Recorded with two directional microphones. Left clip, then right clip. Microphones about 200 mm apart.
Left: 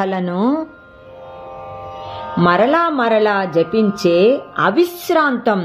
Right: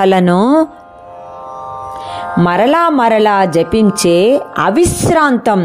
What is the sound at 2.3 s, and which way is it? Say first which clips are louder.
Speech: right 2 dB; 45° right (ahead or behind).